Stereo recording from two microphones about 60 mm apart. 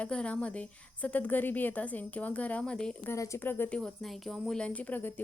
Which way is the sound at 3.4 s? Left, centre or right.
Left.